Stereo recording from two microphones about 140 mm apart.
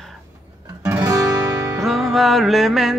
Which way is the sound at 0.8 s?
20° right (ahead or behind).